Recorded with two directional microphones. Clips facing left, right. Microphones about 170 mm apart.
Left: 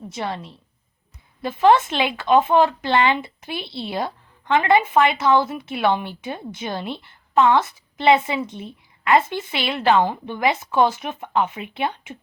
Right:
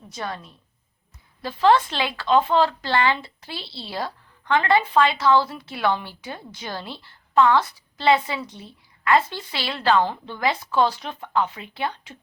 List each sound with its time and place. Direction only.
0.1 s speech: 25° left (ahead or behind)